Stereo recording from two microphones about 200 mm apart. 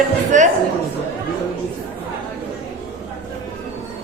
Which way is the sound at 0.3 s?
40° right (ahead or behind).